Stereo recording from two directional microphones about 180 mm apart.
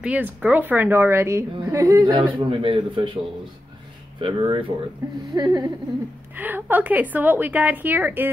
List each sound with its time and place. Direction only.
0.0 s a woman's voice: 5° right (ahead or behind); by 3.2 s 25° right (ahead or behind)
4.2 s speech: 30° right (ahead or behind)
6.3 s a woman's voice: 10° right (ahead or behind)